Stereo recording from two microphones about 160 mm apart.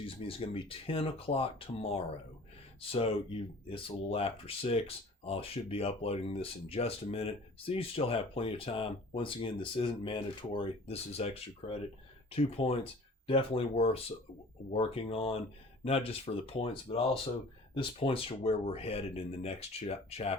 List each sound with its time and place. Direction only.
0.0 s speech: 35° left (ahead or behind)